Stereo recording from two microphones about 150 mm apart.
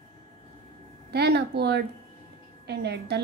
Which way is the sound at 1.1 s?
90° right.